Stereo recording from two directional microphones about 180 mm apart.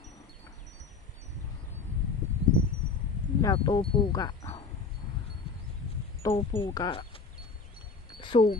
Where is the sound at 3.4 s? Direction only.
25° left (ahead or behind).